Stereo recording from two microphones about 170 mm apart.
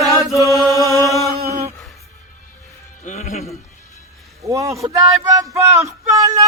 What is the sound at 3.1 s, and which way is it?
Music, 40° left (ahead or behind).